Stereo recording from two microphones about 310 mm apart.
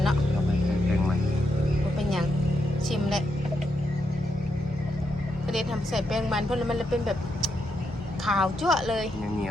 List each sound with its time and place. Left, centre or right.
2.0 s vehicle: centre
5.5 s a woman's voice: centre